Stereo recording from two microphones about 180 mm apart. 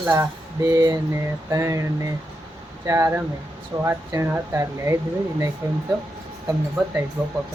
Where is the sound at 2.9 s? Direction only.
15° right (ahead or behind).